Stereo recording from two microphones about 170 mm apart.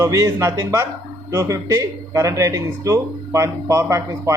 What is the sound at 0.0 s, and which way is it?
Speech, 20° right (ahead or behind).